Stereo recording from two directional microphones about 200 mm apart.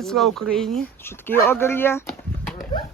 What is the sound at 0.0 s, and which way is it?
Speech, centre (ahead or behind).